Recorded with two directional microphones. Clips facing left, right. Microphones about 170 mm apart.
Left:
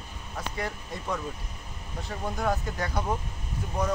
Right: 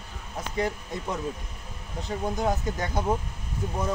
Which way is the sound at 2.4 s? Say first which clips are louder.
Left 1 dB; 20° right (ahead or behind).